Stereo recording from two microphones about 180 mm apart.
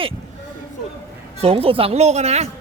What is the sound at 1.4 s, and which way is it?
A woman's voice, 30° right (ahead or behind).